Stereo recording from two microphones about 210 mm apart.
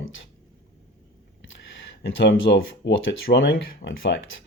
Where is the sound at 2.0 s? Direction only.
55° left (ahead or behind).